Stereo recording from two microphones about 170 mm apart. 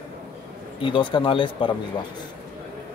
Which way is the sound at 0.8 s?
30° left (ahead or behind).